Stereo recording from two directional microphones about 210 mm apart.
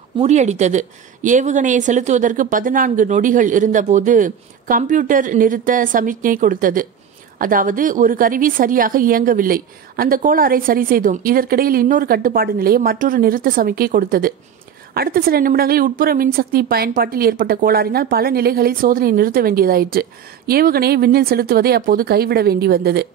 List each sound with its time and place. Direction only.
0.2 s a woman's voice: 35° right (ahead or behind); by 23.0 s 50° right (ahead or behind)